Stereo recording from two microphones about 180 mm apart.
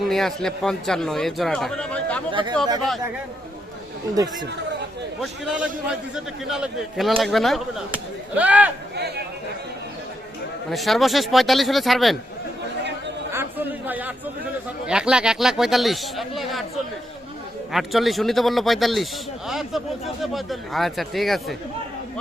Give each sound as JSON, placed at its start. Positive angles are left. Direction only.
{"t": 0.0, "sound": "a man's voice", "side_deg": 0}
{"t": 2.3, "sound": "speech", "side_deg": -25}
{"t": 4.1, "sound": "speech", "side_deg": -20}
{"t": 5.2, "sound": "a man's voice", "side_deg": -5}
{"t": 9.0, "sound": "speech", "side_deg": -65}
{"t": 10.7, "sound": "a man's voice", "side_deg": 0}
{"t": 13.3, "sound": "a sound", "side_deg": -10}
{"t": 14.8, "sound": "a man's voice", "side_deg": -5}
{"t": 17.7, "sound": "a man's voice", "side_deg": 0}